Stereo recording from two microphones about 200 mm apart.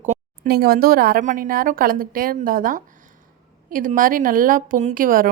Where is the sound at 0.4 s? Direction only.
50° right (ahead or behind).